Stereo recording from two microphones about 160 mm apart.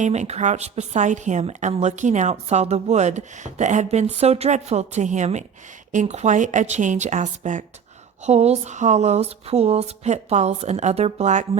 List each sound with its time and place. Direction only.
0.0 s a woman's voice: 45° right (ahead or behind)